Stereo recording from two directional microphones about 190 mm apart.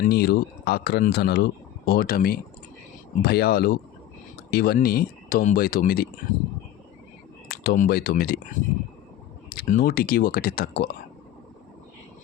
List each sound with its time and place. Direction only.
0.0 s speech: 55° left (ahead or behind)
7.4 s speech: 55° left (ahead or behind)